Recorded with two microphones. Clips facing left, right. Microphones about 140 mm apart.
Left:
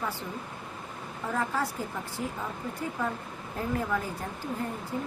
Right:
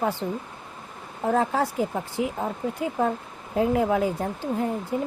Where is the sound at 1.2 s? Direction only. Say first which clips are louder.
Right 8 dB; 55° right (ahead or behind).